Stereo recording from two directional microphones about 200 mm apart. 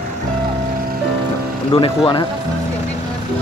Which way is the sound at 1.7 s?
25° left (ahead or behind).